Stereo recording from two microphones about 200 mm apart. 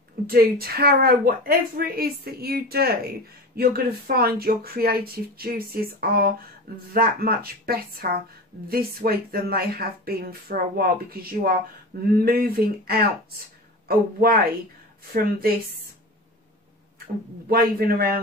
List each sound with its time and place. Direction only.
0.3 s speech: 50° right (ahead or behind)
17.5 s speech: 50° right (ahead or behind)